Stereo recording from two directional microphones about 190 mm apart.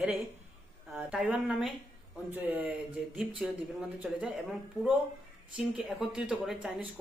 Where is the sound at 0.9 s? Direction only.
5° right (ahead or behind).